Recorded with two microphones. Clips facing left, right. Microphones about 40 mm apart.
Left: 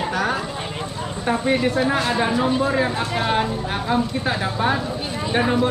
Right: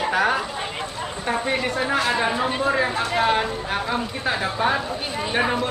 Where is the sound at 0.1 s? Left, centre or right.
Centre.